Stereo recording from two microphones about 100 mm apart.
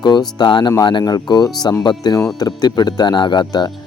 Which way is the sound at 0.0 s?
45° left (ahead or behind).